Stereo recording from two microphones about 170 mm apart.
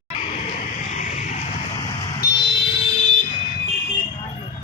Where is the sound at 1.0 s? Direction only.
45° left (ahead or behind).